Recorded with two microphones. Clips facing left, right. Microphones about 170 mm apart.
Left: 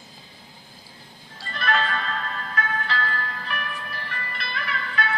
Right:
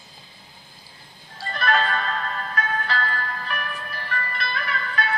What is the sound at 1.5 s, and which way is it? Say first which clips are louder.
Music: right 2 dB; 45° right (ahead or behind).